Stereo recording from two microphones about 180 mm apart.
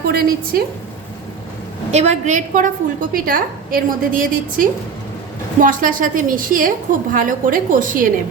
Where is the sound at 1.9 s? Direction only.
40° right (ahead or behind).